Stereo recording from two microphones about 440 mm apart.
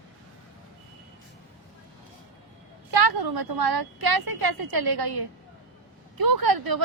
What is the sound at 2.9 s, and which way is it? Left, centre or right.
A woman's voice, right.